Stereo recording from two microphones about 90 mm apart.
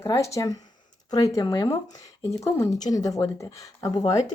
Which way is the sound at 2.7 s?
45° left (ahead or behind).